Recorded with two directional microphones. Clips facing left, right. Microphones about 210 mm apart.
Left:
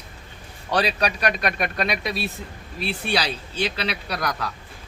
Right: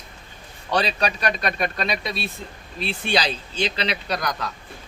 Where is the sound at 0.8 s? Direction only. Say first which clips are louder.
Left 2 dB; 10° left (ahead or behind).